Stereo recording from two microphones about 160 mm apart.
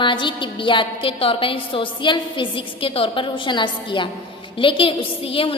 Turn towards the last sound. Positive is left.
turn(degrees=35)  # may be behind; listen again after turning